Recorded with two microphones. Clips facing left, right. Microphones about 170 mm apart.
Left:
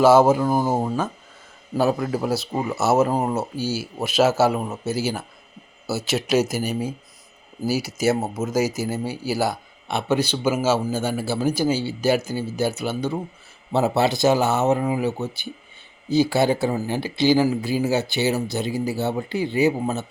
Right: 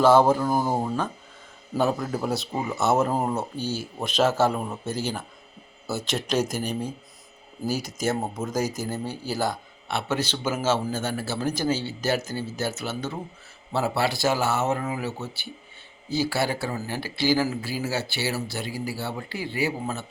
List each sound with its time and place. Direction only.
0.0 s speech: 5° left (ahead or behind)